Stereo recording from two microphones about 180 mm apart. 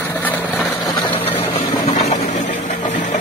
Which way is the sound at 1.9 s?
35° left (ahead or behind).